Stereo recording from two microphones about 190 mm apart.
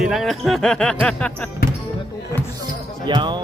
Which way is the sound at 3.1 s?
25° right (ahead or behind).